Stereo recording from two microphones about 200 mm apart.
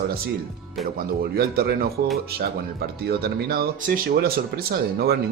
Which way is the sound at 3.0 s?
50° right (ahead or behind).